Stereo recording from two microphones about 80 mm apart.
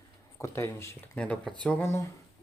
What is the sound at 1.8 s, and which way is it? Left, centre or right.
Speech, left.